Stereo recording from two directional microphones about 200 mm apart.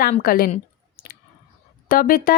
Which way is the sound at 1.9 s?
45° left (ahead or behind).